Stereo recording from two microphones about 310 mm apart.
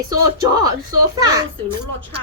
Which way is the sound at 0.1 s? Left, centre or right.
Centre.